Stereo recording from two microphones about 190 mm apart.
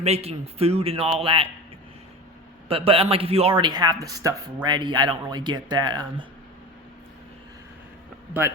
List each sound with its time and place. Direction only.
0.0 s a man's voice: 35° right (ahead or behind)
2.6 s a man's voice: 30° right (ahead or behind)
8.3 s a man's voice: 15° right (ahead or behind)